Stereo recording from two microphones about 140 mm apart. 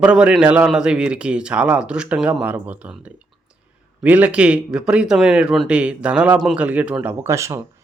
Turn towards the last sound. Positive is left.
turn(degrees=-20)  # may be behind; listen again after turning